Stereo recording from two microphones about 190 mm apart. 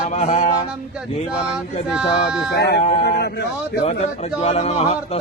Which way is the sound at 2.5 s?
60° left (ahead or behind).